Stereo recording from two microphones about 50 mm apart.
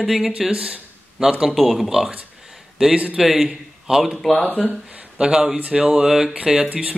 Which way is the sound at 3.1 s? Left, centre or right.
Centre.